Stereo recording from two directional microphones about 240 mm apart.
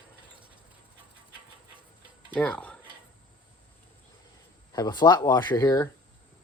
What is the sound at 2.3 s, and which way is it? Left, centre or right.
Speech, centre.